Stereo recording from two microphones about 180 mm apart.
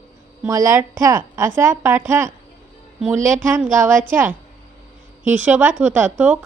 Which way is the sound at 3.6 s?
45° right (ahead or behind).